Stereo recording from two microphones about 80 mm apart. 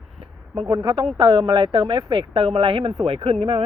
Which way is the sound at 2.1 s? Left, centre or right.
Right.